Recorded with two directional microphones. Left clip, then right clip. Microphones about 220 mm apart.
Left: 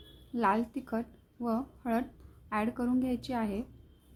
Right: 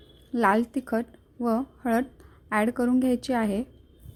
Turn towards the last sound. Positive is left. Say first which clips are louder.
# right 8 dB
turn(degrees=-35)  # may be behind; listen again after turning